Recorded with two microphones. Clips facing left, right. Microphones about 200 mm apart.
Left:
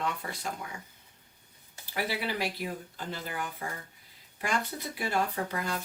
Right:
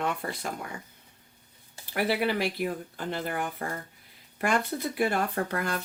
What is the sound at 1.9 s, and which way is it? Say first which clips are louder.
Speech: right 6 dB; 55° right (ahead or behind).